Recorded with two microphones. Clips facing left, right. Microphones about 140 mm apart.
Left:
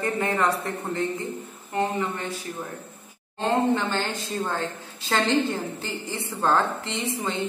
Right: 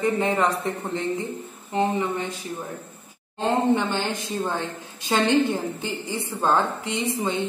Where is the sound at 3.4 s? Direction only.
15° right (ahead or behind).